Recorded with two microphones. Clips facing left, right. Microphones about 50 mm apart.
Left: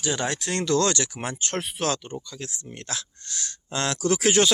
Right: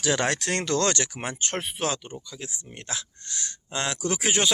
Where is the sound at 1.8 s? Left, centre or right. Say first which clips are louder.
Left 2 dB; centre.